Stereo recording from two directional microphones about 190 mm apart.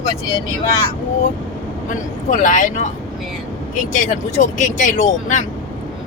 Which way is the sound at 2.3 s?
40° left (ahead or behind).